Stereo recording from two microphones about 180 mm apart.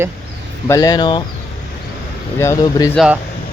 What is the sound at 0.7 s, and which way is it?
Speech, 20° left (ahead or behind).